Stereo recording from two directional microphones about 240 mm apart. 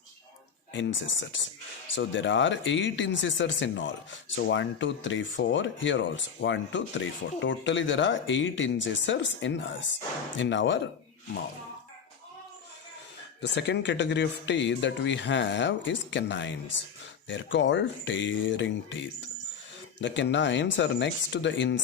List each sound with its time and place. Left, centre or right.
0.7 s speech: left
13.4 s speech: left